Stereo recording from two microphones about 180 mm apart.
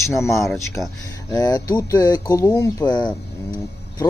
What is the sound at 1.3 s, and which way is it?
Speech, 20° left (ahead or behind).